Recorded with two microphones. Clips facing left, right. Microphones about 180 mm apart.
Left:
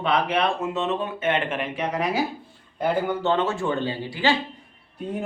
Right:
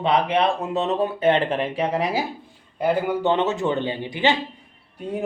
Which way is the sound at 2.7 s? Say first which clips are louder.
Right 2 dB; 10° right (ahead or behind).